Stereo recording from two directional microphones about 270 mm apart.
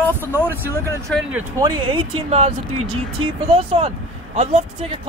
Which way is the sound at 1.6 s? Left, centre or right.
Centre.